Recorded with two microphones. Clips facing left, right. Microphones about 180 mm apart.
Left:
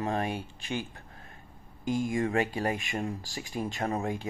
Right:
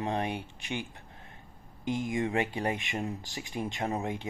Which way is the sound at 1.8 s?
20° right (ahead or behind).